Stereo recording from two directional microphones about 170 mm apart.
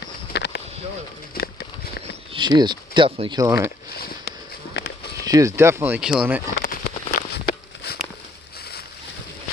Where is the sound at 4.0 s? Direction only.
65° left (ahead or behind).